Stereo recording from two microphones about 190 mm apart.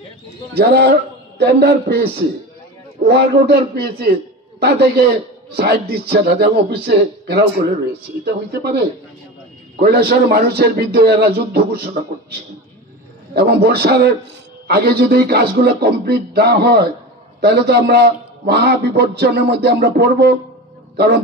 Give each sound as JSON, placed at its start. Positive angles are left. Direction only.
{"t": 0.6, "sound": "a man's voice", "side_deg": -55}
{"t": 3.1, "sound": "a man's voice", "side_deg": -60}